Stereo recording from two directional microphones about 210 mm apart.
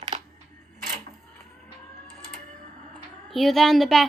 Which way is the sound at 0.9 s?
35° right (ahead or behind).